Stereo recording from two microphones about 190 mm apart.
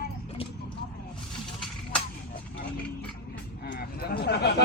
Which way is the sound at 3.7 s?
55° left (ahead or behind).